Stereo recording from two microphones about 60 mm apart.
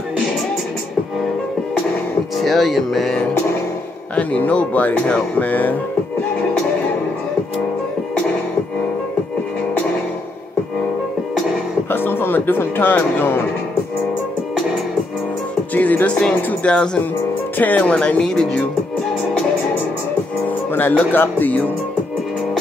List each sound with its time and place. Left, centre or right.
2.3 s speech: centre
4.1 s speech: left
11.9 s a sound: left
15.7 s speech: left
16.6 s speech: centre
17.6 s speech: left
20.4 s speech: left